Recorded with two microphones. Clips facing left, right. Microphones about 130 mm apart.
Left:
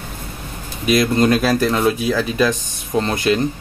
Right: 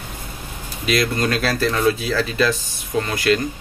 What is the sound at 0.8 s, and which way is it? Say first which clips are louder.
Speech: left 5 dB; 20° left (ahead or behind).